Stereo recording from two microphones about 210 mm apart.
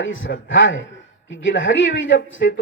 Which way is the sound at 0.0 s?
65° left (ahead or behind).